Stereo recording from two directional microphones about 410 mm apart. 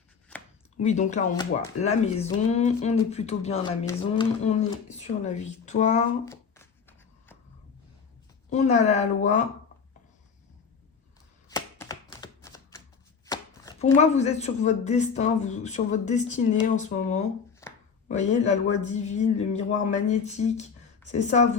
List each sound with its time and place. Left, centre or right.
0.8 s speech: centre
6.3 s a sound: centre
8.4 s speech: centre
11.4 s chopping: centre
13.2 s speech: centre
17.6 s a sound: centre
18.1 s speech: centre